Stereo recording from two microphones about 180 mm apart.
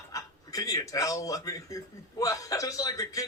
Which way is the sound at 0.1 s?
20° left (ahead or behind).